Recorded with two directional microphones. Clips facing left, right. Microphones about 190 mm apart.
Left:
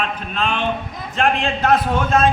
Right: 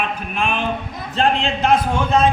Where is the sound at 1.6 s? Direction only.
15° right (ahead or behind).